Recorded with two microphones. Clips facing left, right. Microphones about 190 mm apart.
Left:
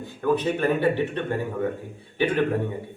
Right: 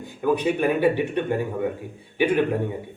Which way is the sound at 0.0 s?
15° right (ahead or behind).